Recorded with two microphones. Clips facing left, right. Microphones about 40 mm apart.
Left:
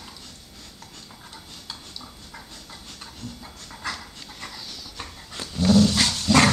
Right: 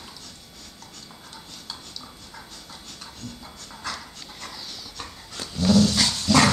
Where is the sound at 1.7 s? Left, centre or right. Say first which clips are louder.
Even; centre.